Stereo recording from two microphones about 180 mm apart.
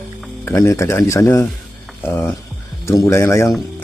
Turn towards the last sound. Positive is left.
turn(degrees=15)  # may be behind; listen again after turning